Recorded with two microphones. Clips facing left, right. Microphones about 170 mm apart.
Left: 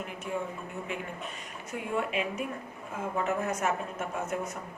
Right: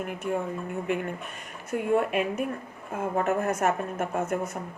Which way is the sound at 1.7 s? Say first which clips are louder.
Right 7 dB; 50° right (ahead or behind).